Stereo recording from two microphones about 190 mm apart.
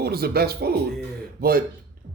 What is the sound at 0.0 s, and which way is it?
Speech, 55° right (ahead or behind).